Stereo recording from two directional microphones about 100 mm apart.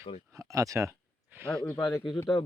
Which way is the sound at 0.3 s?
35° right (ahead or behind).